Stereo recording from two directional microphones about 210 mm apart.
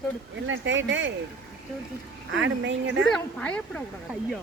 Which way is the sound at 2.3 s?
60° right (ahead or behind).